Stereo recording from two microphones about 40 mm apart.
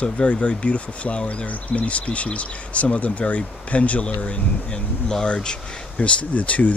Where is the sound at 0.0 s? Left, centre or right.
Left.